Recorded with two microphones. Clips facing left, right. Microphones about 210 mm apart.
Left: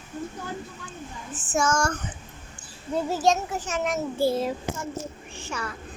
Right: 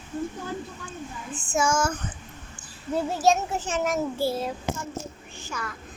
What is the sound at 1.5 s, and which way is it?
Speech, 5° right (ahead or behind).